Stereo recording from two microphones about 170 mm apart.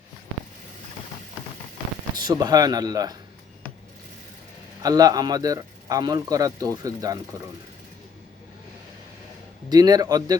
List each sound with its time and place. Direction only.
2.1 s a man's voice: 25° right (ahead or behind)
4.8 s a man's voice: 20° right (ahead or behind)
9.6 s a man's voice: 25° right (ahead or behind)